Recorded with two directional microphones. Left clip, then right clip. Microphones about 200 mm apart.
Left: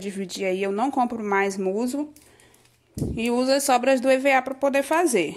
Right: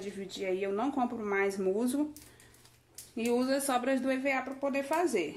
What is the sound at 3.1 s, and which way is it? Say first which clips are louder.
Speech: left 8 dB; 45° left (ahead or behind).